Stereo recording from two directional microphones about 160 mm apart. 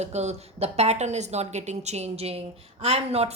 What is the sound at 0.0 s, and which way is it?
A woman's voice, 45° right (ahead or behind).